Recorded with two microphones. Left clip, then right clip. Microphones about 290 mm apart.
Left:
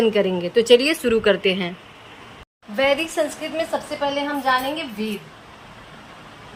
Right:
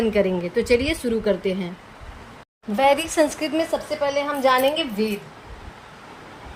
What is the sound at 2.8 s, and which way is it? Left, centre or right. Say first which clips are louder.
A woman's voice: right 2 dB; right.